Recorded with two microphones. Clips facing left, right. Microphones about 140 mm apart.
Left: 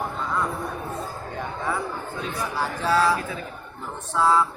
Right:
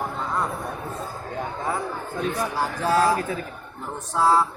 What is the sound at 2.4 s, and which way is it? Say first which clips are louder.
Speech: left 2 dB; 45° right (ahead or behind).